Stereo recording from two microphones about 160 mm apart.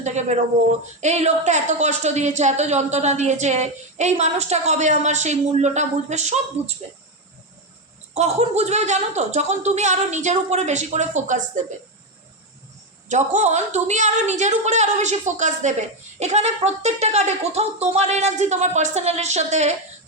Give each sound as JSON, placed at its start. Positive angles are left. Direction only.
{"t": 0.0, "sound": "a woman's voice", "side_deg": -45}
{"t": 8.1, "sound": "a woman's voice", "side_deg": -45}
{"t": 13.1, "sound": "a woman's voice", "side_deg": -45}